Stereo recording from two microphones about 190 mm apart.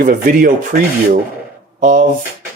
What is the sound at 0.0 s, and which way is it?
Speech, 45° right (ahead or behind).